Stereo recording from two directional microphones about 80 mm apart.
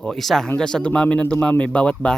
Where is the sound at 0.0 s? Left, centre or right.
Centre.